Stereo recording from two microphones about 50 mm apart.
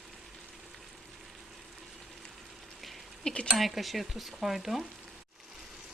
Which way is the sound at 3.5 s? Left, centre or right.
Centre.